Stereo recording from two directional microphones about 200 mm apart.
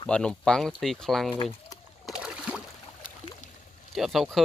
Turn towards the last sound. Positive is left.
turn(degrees=0)  # may be behind; listen again after turning